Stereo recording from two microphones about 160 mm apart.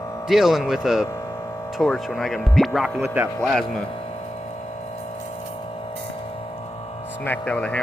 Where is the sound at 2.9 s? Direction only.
10° right (ahead or behind).